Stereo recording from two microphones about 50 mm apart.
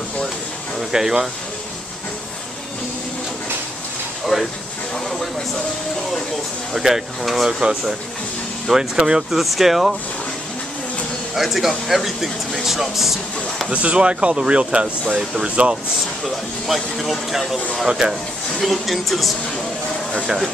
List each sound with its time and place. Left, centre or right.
0.7 s speech: centre
4.3 s speech: centre
6.7 s speech: centre
8.6 s speech: centre
11.3 s speech: centre
13.7 s speech: right
16.3 s speech: centre
17.8 s speech: centre
18.6 s speech: centre